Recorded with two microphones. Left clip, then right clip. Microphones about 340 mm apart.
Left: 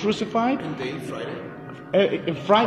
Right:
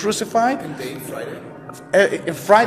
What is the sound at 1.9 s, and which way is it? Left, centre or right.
Speech, right.